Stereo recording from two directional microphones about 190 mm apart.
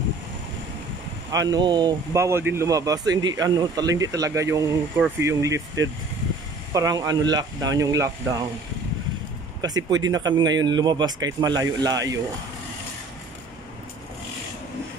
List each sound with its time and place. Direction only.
1.3 s speech: 20° right (ahead or behind)
9.6 s speech: 20° right (ahead or behind)